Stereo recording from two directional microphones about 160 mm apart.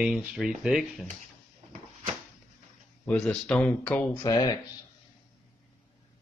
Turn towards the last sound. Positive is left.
turn(degrees=25)  # may be behind; listen again after turning